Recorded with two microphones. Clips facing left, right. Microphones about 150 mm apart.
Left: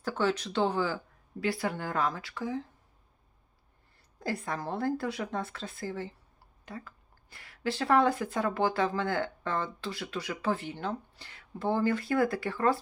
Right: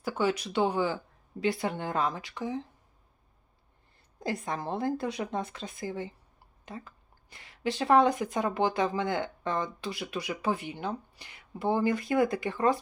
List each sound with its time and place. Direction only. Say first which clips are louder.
0.0 s a woman's voice: right 1 dB; 10° right (ahead or behind)
4.2 s a woman's voice: right 1 dB; 20° right (ahead or behind)